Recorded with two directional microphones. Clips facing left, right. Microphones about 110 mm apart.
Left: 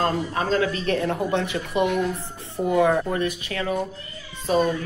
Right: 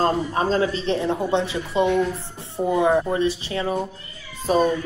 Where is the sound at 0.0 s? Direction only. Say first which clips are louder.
Right 3 dB; 30° right (ahead or behind).